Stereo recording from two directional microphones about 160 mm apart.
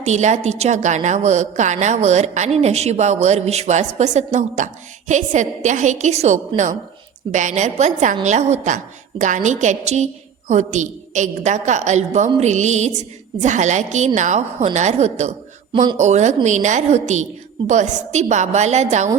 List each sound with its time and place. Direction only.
0.0 s a woman's voice: 45° right (ahead or behind)